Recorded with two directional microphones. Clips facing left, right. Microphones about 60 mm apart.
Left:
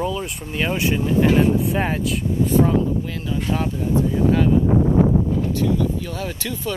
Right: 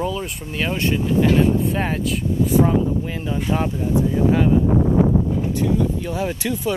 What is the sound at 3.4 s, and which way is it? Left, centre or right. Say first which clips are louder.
Speech: right 2 dB; centre.